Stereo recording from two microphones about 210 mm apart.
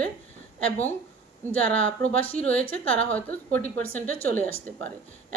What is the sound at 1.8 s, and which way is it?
A woman's voice, 5° left (ahead or behind).